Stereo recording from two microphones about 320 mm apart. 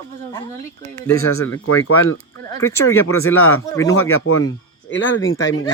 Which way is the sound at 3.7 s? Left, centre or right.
Centre.